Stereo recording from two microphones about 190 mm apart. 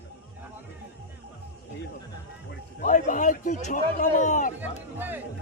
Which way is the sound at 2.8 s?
40° left (ahead or behind).